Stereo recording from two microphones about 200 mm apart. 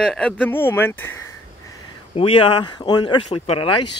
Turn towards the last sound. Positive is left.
turn(degrees=25)  # may be behind; listen again after turning